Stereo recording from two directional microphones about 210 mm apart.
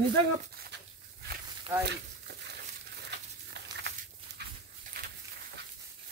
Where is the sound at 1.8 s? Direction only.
50° right (ahead or behind).